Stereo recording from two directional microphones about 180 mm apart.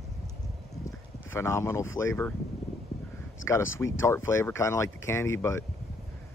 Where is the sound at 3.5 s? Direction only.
15° left (ahead or behind).